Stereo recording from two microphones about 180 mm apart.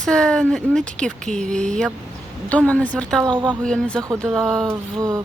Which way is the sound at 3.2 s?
25° right (ahead or behind).